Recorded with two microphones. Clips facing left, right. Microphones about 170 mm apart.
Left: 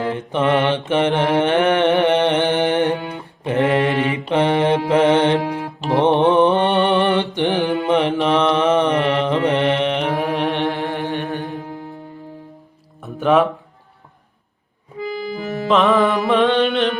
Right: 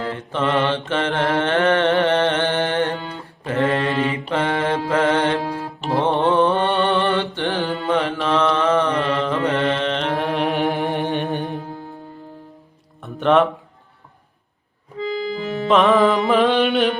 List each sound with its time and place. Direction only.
0.0 s mantra: 20° left (ahead or behind)
10.1 s mantra: centre (ahead or behind)
10.7 s music: 20° right (ahead or behind)
13.0 s music: 5° left (ahead or behind)
15.4 s music: 45° left (ahead or behind)
15.6 s music: centre (ahead or behind)